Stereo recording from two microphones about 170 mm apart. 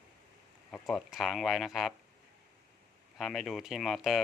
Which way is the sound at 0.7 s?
Centre (ahead or behind).